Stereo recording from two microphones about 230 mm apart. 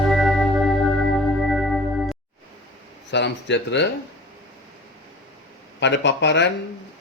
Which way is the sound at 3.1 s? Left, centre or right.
Left.